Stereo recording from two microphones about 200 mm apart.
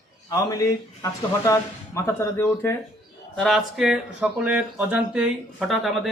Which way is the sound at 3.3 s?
Centre (ahead or behind).